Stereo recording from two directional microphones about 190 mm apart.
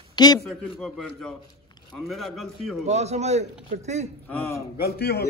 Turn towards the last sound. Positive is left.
turn(degrees=55)  # may be behind; listen again after turning